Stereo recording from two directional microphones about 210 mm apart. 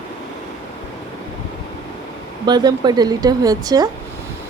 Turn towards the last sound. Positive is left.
turn(degrees=-20)  # may be behind; listen again after turning